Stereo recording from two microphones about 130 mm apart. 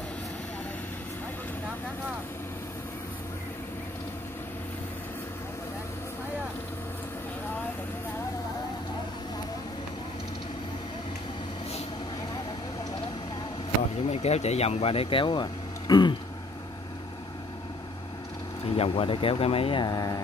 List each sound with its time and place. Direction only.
13.9 s speech: 55° left (ahead or behind); by 16.2 s 35° left (ahead or behind)
18.7 s speech: 45° left (ahead or behind)